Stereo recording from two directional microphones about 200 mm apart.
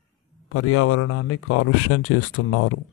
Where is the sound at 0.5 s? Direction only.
90° left.